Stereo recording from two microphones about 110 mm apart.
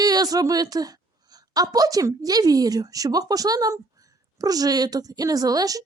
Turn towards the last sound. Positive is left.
turn(degrees=-35)  # may be behind; listen again after turning